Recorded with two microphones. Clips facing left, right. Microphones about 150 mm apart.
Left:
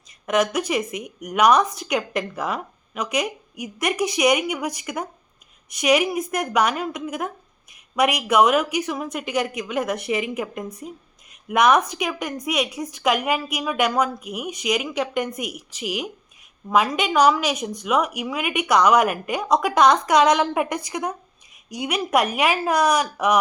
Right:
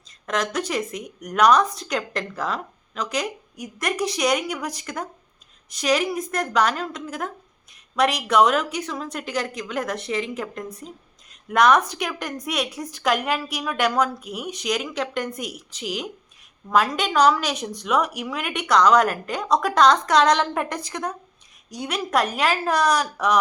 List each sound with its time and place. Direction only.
0.3 s a woman's voice: 5° left (ahead or behind)
3.9 s a woman's voice: 20° left (ahead or behind)